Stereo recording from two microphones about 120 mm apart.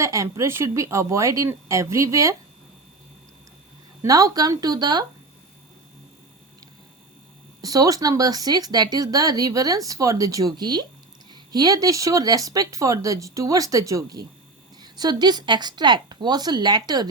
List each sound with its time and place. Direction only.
0.0 s speech: 25° right (ahead or behind)
4.0 s speech: 30° right (ahead or behind)
7.6 s speech: 30° right (ahead or behind)